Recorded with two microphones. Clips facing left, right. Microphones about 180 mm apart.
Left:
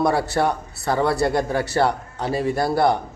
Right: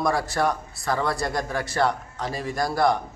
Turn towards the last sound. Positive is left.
turn(degrees=30)  # may be behind; listen again after turning